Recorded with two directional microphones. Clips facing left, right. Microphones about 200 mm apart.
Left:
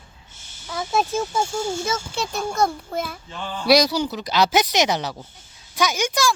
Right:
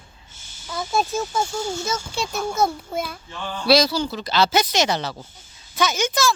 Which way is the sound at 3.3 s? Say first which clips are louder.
Even; 15° left (ahead or behind).